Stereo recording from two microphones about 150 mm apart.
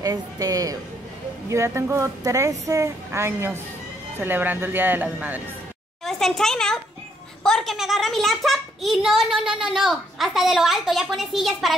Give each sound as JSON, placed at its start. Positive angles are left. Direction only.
{"t": 0.0, "sound": "a woman's voice", "side_deg": -25}
{"t": 6.0, "sound": "a child's voice", "side_deg": 0}